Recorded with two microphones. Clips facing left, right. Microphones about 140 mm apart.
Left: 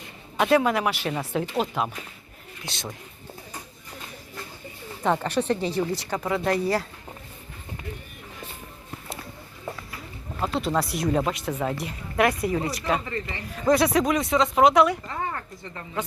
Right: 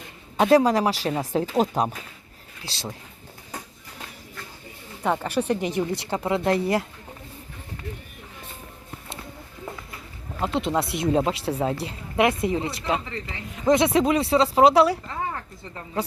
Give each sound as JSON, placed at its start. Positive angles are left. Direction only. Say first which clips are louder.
{"t": 0.3, "sound": "speech", "louder": "right 3 dB", "side_deg": -35}
{"t": 5.0, "sound": "speech", "louder": "even", "side_deg": -5}
{"t": 10.4, "sound": "speech", "louder": "right 1 dB", "side_deg": -20}
{"t": 15.0, "sound": "a sound", "louder": "even", "side_deg": -5}